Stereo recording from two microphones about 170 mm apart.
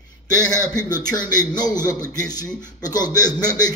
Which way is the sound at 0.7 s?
20° left (ahead or behind).